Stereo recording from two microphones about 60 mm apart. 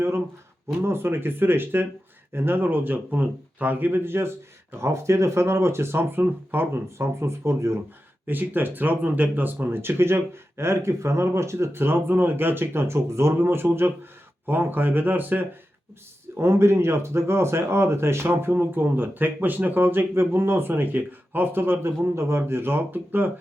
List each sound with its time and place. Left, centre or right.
0.8 s speech: right
8.3 s speech: right
16.4 s speech: right